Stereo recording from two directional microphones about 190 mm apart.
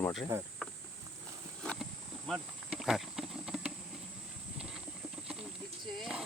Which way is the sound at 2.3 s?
Centre (ahead or behind).